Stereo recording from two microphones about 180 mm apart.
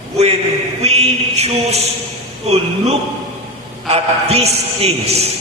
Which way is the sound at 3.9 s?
35° right (ahead or behind).